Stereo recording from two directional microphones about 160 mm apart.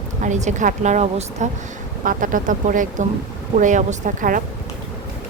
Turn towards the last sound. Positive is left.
turn(degrees=-55)  # may be behind; listen again after turning